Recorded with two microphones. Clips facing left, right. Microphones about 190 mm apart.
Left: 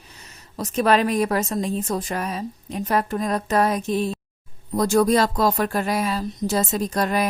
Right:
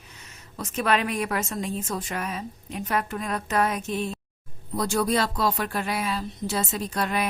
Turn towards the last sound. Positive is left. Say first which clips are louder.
# left 5 dB
turn(degrees=40)  # may be behind; listen again after turning